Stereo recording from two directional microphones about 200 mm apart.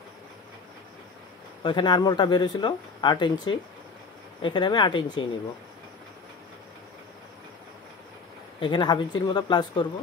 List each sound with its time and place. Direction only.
1.6 s speech: 25° left (ahead or behind)
8.5 s speech: 20° left (ahead or behind)